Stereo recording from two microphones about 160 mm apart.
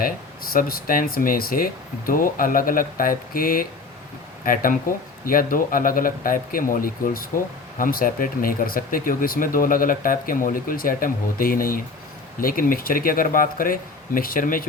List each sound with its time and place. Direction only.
0.5 s speech: 65° left (ahead or behind)